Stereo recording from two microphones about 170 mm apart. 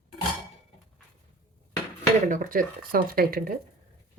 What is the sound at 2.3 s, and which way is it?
Speech, 55° right (ahead or behind).